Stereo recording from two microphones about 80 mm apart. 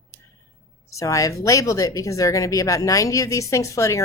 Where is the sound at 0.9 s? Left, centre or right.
Left.